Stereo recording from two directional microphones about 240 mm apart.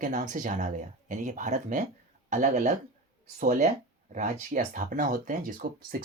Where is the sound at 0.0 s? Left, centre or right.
Right.